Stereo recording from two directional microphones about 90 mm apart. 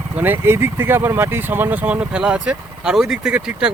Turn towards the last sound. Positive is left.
turn(degrees=-10)  # may be behind; listen again after turning